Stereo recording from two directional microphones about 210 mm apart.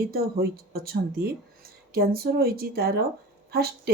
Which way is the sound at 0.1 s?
45° right (ahead or behind).